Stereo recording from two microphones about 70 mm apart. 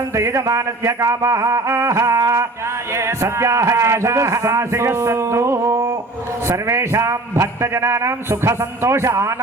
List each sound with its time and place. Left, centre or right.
0.2 s speech: right
2.9 s a man's voice: right